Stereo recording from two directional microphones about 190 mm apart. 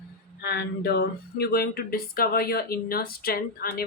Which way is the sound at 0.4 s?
60° left (ahead or behind).